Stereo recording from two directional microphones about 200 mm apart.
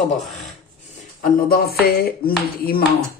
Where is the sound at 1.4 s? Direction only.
50° left (ahead or behind).